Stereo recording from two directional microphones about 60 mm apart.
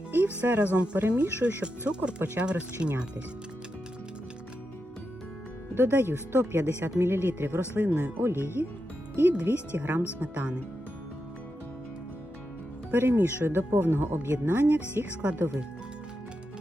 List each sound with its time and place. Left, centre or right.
0.1 s speech: right
1.9 s speech: centre
5.7 s speech: right
9.5 s speech: right
10.2 s speech: right
12.9 s speech: right